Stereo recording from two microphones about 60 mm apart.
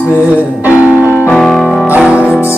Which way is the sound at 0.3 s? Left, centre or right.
Right.